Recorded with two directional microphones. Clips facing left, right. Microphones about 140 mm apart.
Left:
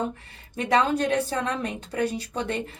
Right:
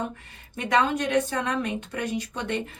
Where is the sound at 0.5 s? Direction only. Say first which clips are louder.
Left 1 dB; 35° left (ahead or behind).